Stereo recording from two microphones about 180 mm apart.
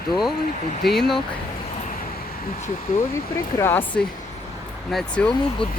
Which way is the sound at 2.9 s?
50° left (ahead or behind).